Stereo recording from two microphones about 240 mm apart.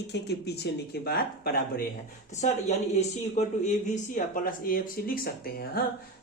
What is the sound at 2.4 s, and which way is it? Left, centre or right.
A woman's voice, left.